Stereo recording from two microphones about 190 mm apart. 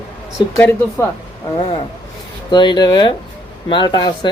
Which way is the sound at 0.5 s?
5° left (ahead or behind).